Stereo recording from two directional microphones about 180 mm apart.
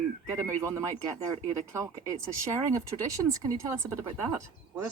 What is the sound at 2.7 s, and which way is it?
Speech, 20° right (ahead or behind).